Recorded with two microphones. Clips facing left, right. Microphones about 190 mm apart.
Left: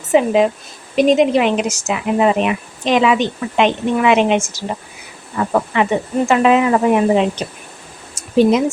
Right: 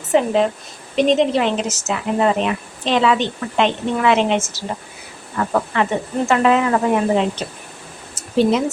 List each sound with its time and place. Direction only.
0.1 s speech: 10° left (ahead or behind)